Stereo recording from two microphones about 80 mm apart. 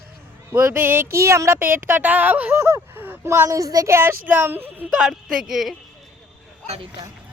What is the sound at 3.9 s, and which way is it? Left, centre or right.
Speech, right.